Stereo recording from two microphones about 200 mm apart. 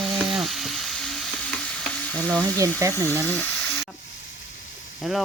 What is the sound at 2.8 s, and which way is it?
Speech, 15° right (ahead or behind).